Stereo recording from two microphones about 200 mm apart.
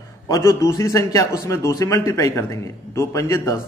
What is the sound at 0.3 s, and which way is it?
A man's voice, 15° left (ahead or behind).